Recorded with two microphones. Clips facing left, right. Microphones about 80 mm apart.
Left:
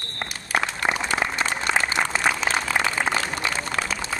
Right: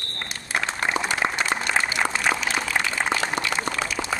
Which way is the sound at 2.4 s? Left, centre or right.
Left.